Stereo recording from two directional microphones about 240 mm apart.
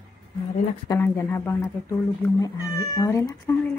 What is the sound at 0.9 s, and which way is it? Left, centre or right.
Speech, centre.